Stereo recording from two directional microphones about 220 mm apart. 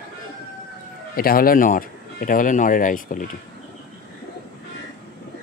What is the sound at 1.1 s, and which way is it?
Speech, 40° left (ahead or behind).